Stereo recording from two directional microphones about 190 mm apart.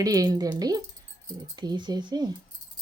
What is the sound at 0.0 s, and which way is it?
Speech, 20° right (ahead or behind).